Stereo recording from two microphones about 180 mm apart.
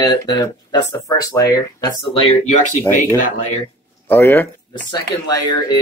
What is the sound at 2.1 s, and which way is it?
Speech, 35° left (ahead or behind).